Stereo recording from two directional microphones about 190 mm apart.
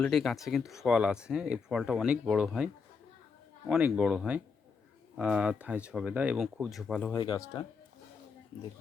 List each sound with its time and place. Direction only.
0.0 s speech: centre (ahead or behind)
3.7 s speech: 5° right (ahead or behind)
7.1 s speech: 20° left (ahead or behind)